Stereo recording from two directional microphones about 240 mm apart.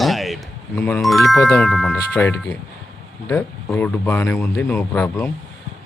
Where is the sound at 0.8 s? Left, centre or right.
Centre.